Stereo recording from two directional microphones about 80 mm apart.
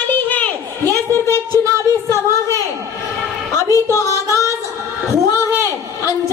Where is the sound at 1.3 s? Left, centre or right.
Left.